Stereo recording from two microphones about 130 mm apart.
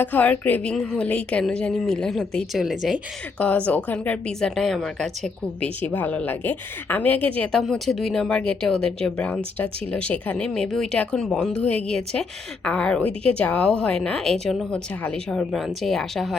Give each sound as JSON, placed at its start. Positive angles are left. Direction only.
{"t": 0.0, "sound": "speech", "side_deg": 15}
{"t": 3.3, "sound": "a woman's voice", "side_deg": 10}